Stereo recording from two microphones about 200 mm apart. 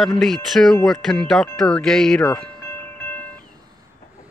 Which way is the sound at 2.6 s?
10° left (ahead or behind).